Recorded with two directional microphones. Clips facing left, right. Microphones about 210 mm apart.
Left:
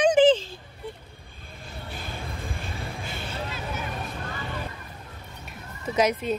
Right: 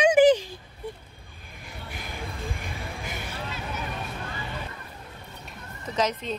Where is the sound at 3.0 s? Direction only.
10° right (ahead or behind).